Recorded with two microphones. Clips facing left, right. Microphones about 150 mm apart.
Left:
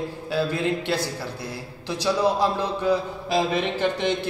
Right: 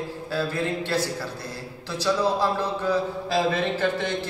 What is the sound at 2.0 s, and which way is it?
Speech, 15° left (ahead or behind).